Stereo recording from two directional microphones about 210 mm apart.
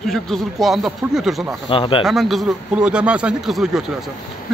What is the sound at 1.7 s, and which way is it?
Speech, 25° left (ahead or behind).